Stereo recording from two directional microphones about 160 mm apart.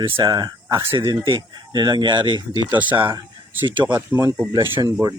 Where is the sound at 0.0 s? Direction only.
30° right (ahead or behind).